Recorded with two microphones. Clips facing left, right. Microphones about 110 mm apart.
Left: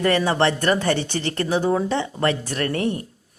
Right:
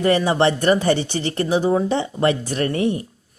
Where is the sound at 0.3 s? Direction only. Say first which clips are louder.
Right 3 dB; 15° right (ahead or behind).